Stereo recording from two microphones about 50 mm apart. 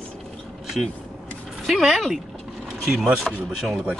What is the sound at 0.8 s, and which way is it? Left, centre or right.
Speech, centre.